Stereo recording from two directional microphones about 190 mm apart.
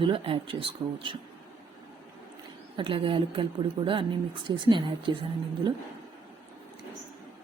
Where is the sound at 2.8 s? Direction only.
25° right (ahead or behind).